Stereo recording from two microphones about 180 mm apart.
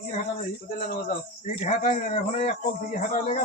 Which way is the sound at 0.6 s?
50° left (ahead or behind).